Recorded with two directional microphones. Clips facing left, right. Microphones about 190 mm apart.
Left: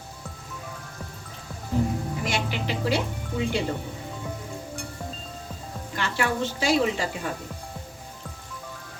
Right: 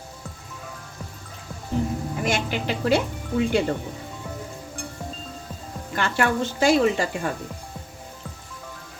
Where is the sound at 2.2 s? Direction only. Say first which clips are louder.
Right 5 dB; 50° right (ahead or behind).